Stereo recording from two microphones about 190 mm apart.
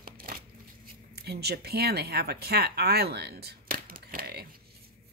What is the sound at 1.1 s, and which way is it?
Speech, 60° right (ahead or behind).